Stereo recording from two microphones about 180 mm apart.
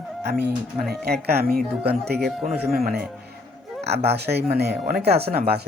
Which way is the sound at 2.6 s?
55° right (ahead or behind).